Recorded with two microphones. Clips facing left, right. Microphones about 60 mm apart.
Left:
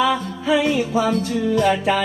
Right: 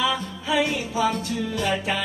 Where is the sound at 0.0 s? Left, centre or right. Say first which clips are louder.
Left 6 dB; left.